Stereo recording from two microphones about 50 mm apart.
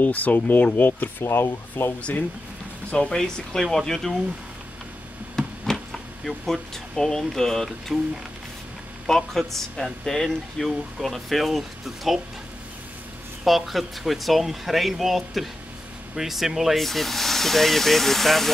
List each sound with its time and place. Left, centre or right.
0.0 s speech: left
1.2 s speech: left
2.0 s speech: left; by 4.1 s centre
5.3 s a sound: centre
9.0 s speech: centre
13.4 s speech: centre